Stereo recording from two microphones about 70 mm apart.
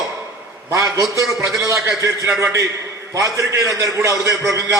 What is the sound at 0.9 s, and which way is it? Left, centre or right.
A man's voice, right.